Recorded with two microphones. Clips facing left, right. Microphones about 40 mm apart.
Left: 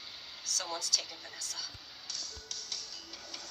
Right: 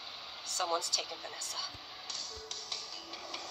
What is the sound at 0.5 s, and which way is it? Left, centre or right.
Speech, right.